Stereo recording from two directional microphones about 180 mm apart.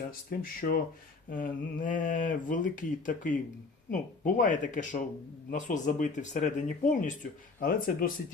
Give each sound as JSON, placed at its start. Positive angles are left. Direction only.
{"t": 0.1, "sound": "speech", "side_deg": 55}